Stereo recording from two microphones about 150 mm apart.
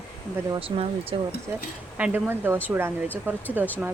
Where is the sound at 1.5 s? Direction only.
20° right (ahead or behind).